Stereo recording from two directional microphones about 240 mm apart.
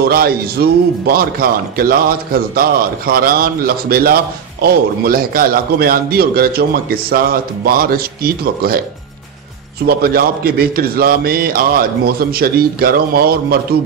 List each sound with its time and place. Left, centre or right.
0.0 s speech: right
9.8 s speech: right